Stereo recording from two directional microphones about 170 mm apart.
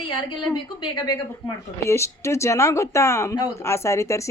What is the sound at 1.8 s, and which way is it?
Speech, 15° left (ahead or behind).